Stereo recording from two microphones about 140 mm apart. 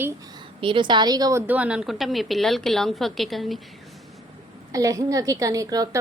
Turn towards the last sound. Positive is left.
turn(degrees=-25)  # may be behind; listen again after turning